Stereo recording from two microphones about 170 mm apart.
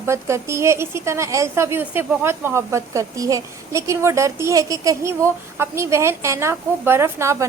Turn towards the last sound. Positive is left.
turn(degrees=-15)  # may be behind; listen again after turning